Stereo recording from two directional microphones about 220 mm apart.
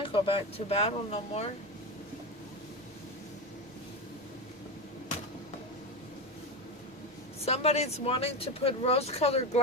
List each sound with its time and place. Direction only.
0.0 s speech: 25° left (ahead or behind)
7.4 s speech: 30° left (ahead or behind)